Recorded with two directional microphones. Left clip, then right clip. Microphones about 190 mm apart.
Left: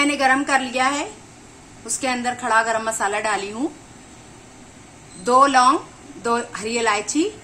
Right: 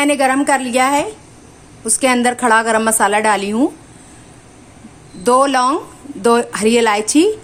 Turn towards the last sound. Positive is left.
turn(degrees=-60)  # may be behind; listen again after turning